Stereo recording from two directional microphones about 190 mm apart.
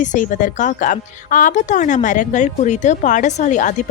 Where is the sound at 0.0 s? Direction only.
40° left (ahead or behind).